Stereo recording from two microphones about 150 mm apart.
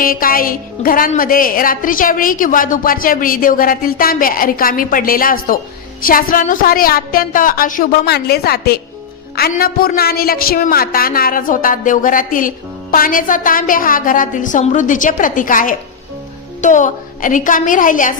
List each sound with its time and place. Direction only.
0.0 s a man's voice: 70° left (ahead or behind)